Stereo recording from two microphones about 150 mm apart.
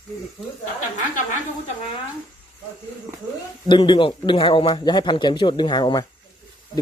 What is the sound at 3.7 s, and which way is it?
Speech, 30° left (ahead or behind).